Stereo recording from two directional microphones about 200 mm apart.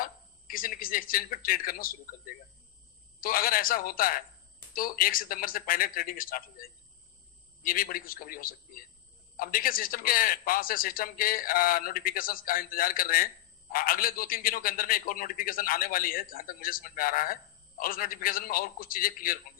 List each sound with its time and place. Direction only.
0.0 s a man's voice: 45° left (ahead or behind)